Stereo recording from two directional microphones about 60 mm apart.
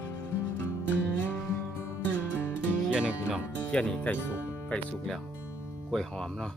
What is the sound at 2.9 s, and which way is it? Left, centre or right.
Music, centre.